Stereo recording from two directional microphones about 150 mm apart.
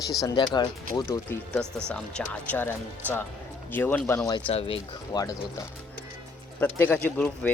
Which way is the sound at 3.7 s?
15° left (ahead or behind).